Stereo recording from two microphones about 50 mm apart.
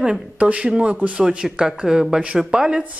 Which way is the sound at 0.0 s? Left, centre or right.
Right.